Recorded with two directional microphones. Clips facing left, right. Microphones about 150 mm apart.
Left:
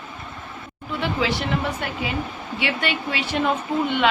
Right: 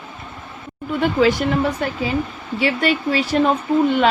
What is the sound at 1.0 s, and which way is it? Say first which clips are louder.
Speech: right 8 dB; 45° right (ahead or behind).